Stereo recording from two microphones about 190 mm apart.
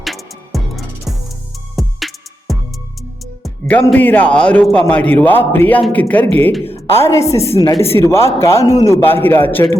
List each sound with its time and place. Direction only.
0.0 s music: centre (ahead or behind)
3.4 s speech: 5° left (ahead or behind)
7.5 s speech: 25° left (ahead or behind); by 9.6 s 10° left (ahead or behind)